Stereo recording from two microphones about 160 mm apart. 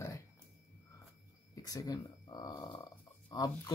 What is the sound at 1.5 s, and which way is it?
Speech, 20° left (ahead or behind).